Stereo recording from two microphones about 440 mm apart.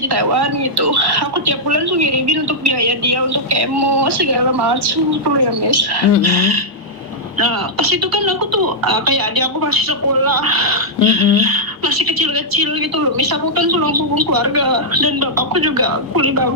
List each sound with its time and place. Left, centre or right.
0.1 s speech: right
7.3 s a woman's voice: right